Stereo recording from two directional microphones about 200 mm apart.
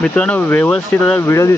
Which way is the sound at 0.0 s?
5° left (ahead or behind).